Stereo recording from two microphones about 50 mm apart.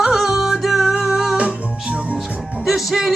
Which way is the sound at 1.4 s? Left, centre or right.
Centre.